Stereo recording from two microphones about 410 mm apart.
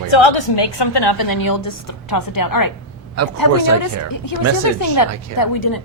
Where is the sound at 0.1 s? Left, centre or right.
Left.